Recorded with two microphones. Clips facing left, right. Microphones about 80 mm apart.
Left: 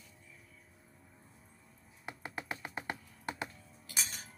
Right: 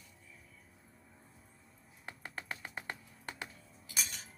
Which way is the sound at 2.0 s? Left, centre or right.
Centre.